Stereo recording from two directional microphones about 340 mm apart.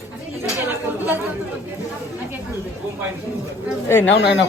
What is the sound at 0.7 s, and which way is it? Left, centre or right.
Chatter, centre.